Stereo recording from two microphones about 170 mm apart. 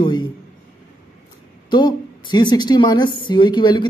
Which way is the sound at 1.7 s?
30° left (ahead or behind).